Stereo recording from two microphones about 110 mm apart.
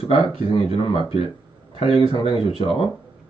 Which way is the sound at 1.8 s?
50° left (ahead or behind).